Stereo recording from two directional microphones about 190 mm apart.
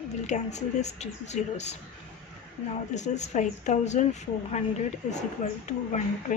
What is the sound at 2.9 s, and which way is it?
Speech, 35° left (ahead or behind).